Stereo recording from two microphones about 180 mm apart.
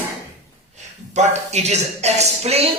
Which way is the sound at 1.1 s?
40° right (ahead or behind).